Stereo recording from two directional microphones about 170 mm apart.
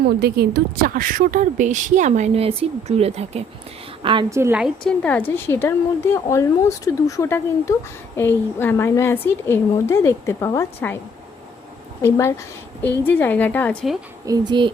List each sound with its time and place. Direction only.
0.2 s a woman's voice: 70° right (ahead or behind); by 4.3 s 30° right (ahead or behind)
4.3 s a woman's voice: 15° right (ahead or behind)
4.6 s a woman's voice: 5° left (ahead or behind)
12.0 s a woman's voice: 15° left (ahead or behind)
14.3 s speech: 25° right (ahead or behind)